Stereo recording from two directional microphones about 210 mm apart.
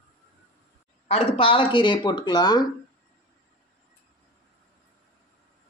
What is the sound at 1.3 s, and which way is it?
Speech, 25° left (ahead or behind).